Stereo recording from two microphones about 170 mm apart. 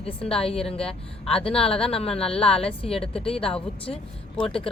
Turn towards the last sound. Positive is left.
turn(degrees=35)  # may be behind; listen again after turning